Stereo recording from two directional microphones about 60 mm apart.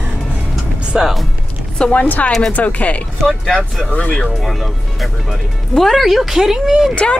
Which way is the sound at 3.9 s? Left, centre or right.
Left.